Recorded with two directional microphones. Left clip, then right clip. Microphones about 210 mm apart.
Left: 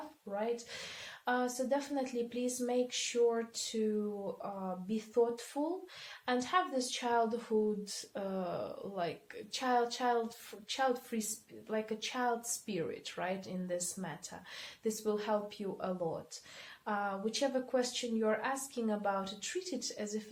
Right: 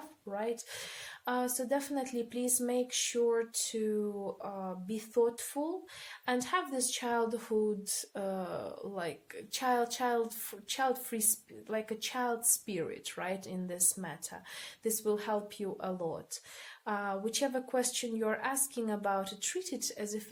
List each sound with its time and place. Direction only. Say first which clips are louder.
0.3 s speech: even; 40° right (ahead or behind)